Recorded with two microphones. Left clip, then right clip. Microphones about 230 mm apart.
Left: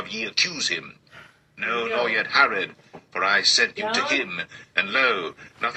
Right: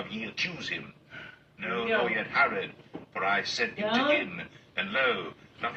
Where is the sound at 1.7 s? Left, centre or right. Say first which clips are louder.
Left 4 dB; left.